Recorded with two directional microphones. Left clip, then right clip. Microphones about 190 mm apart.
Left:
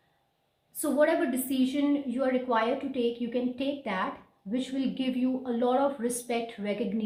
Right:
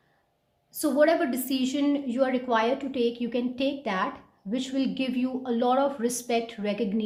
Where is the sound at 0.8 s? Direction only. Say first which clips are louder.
Right 3 dB; 45° right (ahead or behind).